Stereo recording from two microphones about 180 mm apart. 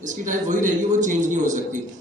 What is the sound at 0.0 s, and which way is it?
A man's voice, 45° right (ahead or behind).